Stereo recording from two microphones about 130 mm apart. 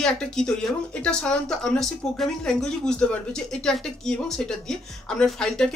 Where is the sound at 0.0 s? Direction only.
5° left (ahead or behind).